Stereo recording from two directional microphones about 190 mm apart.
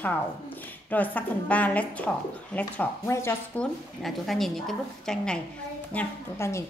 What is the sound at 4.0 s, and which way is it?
A woman's voice, centre (ahead or behind).